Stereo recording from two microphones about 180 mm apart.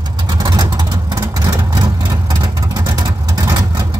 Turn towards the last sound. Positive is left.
turn(degrees=-20)  # may be behind; listen again after turning